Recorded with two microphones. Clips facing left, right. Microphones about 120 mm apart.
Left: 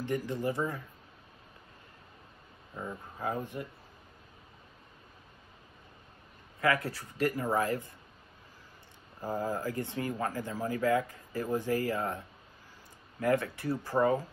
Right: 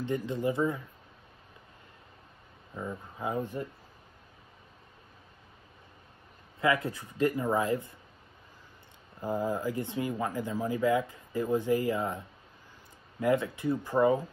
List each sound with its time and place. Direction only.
0.0 s speech: 20° right (ahead or behind)
2.7 s speech: 5° left (ahead or behind)
3.2 s speech: 20° right (ahead or behind)
6.6 s speech: 20° right (ahead or behind)
9.2 s speech: 15° right (ahead or behind)